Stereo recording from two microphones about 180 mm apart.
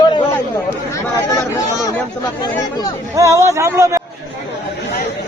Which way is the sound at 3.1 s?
15° right (ahead or behind).